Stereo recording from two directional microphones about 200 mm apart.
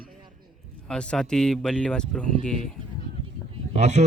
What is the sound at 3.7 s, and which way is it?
Speech, 35° right (ahead or behind).